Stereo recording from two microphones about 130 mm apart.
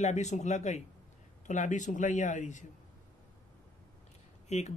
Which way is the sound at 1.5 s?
70° left (ahead or behind).